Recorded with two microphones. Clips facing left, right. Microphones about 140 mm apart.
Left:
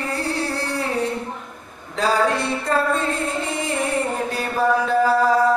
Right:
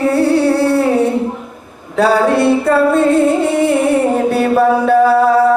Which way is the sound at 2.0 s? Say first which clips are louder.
Right 9 dB; 65° right (ahead or behind).